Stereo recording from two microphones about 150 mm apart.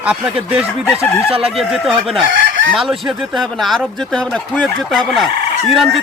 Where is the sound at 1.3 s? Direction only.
40° right (ahead or behind).